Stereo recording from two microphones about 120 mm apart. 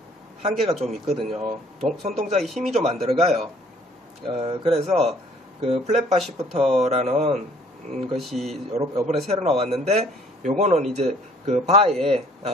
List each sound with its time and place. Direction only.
0.4 s a man's voice: 55° right (ahead or behind)
0.7 s a man's voice: centre (ahead or behind)
1.0 s speech: 60° right (ahead or behind)
2.4 s a man's voice: centre (ahead or behind)
2.7 s speech: 60° right (ahead or behind)
8.2 s a man's voice: centre (ahead or behind)
8.5 s speech: 60° right (ahead or behind)
10.6 s a man's voice: 80° right